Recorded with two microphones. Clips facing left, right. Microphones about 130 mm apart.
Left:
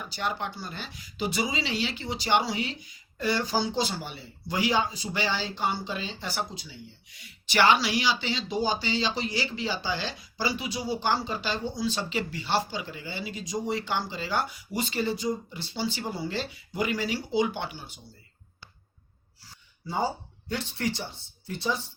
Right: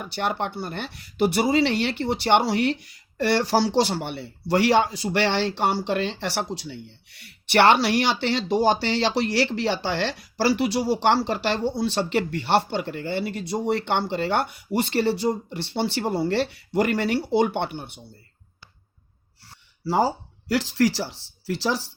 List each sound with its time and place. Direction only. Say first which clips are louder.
0.0 s speech: right 5 dB; 60° right (ahead or behind); by 6.4 s 80° right
6.5 s speech: right 9 dB; 65° right (ahead or behind)
19.5 s speech: right 11 dB; 90° right